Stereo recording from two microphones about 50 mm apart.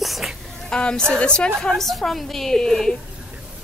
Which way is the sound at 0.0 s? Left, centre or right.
Centre.